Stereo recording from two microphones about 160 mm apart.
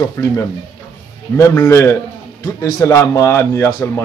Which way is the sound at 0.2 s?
15° left (ahead or behind).